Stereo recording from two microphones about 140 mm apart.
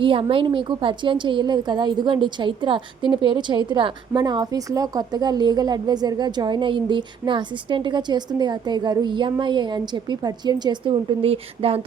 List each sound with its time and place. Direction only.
0.0 s a woman's voice: 40° right (ahead or behind)